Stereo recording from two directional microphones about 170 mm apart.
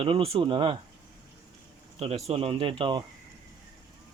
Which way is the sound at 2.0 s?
35° right (ahead or behind).